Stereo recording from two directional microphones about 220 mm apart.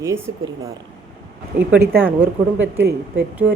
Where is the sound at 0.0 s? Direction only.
15° right (ahead or behind).